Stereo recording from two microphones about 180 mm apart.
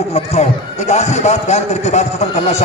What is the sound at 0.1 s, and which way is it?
Speech, 35° left (ahead or behind).